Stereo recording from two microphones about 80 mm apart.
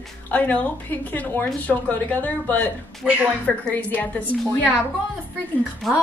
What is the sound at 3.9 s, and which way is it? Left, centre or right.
Speech, centre.